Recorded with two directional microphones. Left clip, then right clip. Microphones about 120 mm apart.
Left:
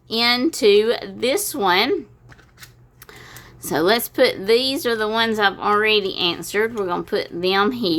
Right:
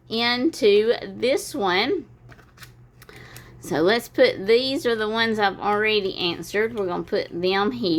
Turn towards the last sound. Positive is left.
turn(degrees=20)  # may be behind; listen again after turning